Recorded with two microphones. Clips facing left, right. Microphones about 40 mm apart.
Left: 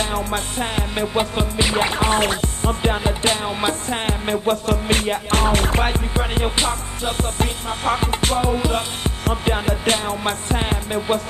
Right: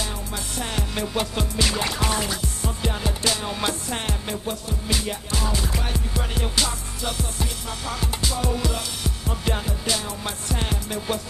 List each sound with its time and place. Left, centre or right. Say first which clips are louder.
0.0 s music: left 9 dB; left
0.6 s music: left 2 dB; left
2.1 s music: left 7 dB; left
3.4 s music: left 5 dB; left
4.0 s music: left 7 dB; left
4.5 s music: left 10 dB; left
8.4 s music: left 4 dB; left